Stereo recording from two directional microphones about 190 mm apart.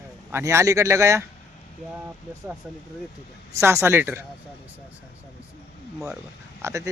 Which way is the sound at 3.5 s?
15° right (ahead or behind).